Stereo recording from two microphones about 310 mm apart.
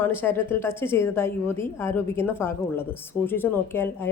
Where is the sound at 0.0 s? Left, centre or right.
Centre.